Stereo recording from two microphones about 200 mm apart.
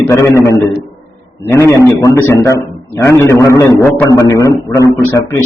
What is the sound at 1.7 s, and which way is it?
A man's voice, 15° left (ahead or behind).